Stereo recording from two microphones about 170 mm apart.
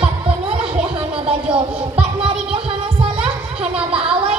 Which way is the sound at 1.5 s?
35° right (ahead or behind).